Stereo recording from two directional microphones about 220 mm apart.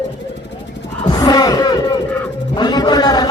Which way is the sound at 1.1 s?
15° left (ahead or behind).